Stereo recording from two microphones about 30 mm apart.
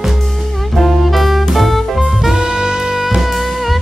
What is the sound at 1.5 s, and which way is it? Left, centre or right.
Music, centre.